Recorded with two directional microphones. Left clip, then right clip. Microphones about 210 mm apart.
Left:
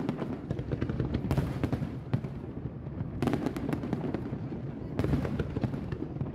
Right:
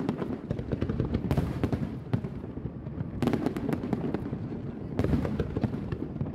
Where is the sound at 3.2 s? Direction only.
10° right (ahead or behind).